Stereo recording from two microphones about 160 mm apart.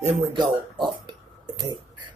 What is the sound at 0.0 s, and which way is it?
Speech, 35° right (ahead or behind).